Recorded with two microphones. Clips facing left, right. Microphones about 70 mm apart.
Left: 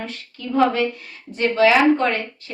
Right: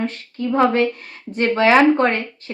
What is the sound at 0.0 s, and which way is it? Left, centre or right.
A woman's voice, right.